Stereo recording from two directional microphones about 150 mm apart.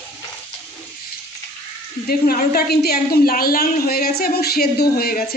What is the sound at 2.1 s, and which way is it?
Speech, 85° left.